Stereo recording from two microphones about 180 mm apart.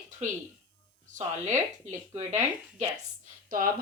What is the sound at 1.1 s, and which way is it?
Speech, 40° right (ahead or behind).